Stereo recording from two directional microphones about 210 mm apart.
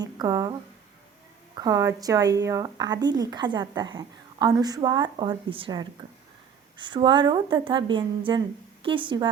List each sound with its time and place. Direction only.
0.0 s speech: 15° right (ahead or behind)
1.5 s a woman's voice: 15° right (ahead or behind)